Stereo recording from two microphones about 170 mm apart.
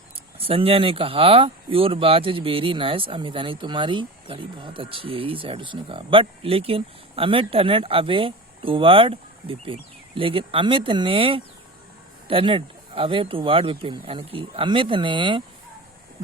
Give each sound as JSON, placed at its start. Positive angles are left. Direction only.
{"t": 0.3, "sound": "speech", "side_deg": -35}